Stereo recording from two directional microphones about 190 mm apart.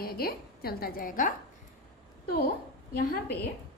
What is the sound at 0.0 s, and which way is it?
A woman's voice, 50° left (ahead or behind).